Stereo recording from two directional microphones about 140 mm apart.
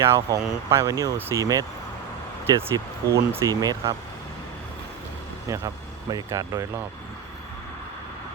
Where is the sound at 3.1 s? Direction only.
25° right (ahead or behind).